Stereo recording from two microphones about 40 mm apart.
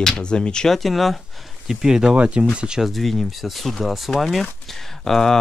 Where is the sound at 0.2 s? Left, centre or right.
Left.